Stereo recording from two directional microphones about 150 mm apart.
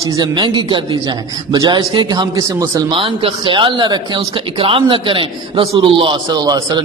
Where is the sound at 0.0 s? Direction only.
25° right (ahead or behind).